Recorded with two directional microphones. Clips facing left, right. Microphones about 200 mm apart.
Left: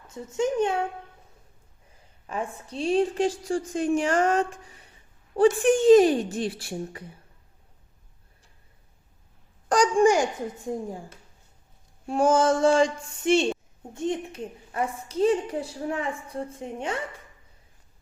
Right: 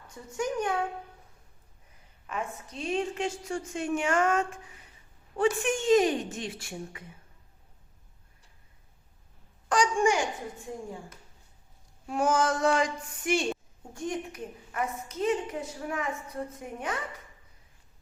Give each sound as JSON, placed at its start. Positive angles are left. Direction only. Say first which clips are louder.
{"t": 0.1, "sound": "a woman's voice", "louder": "left 6 dB", "side_deg": 25}
{"t": 2.2, "sound": "a woman's voice", "louder": "left 3 dB", "side_deg": 30}
{"t": 9.6, "sound": "a woman's voice", "louder": "left 6 dB", "side_deg": 40}
{"t": 12.0, "sound": "a woman's voice", "louder": "left 6 dB", "side_deg": 30}